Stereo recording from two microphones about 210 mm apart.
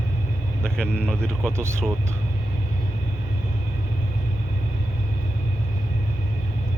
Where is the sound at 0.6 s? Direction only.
5° left (ahead or behind).